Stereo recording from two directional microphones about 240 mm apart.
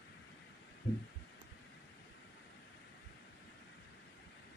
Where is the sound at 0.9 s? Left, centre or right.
Left.